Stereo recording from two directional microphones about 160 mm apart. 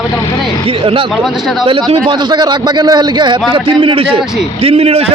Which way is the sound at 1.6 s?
35° right (ahead or behind).